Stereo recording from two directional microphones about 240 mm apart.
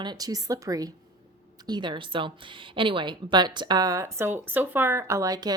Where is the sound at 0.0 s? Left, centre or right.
Centre.